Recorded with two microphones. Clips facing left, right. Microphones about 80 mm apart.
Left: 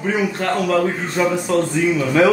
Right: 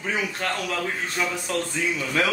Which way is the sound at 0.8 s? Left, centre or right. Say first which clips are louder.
Left 8 dB; left.